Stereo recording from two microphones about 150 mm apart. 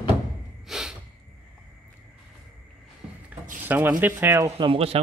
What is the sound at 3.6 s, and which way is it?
Speech, 15° right (ahead or behind).